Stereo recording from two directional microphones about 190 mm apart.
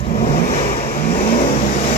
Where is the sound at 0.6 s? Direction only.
35° left (ahead or behind).